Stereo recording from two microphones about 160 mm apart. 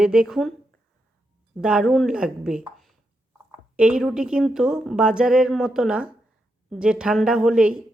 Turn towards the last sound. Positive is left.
turn(degrees=-5)  # may be behind; listen again after turning